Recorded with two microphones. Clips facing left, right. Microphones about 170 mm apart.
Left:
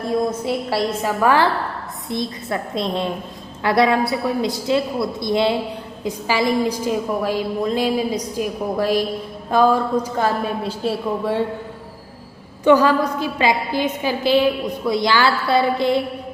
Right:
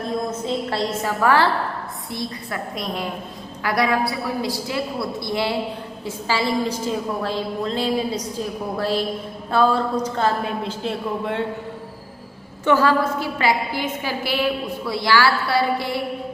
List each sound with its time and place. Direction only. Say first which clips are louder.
0.3 s a woman's voice: left 2 dB; 10° left (ahead or behind)
12.6 s a woman's voice: left 3 dB; 15° left (ahead or behind)